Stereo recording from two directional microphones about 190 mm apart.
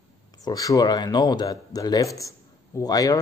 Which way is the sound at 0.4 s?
20° left (ahead or behind).